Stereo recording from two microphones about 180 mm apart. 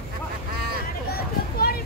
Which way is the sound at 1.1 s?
55° left (ahead or behind).